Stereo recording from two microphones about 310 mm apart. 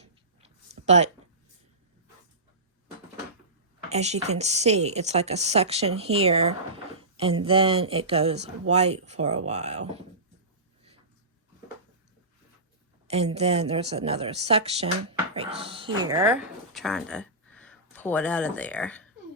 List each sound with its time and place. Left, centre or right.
0.0 s a sound: right
3.8 s speech: right
13.1 s speech: centre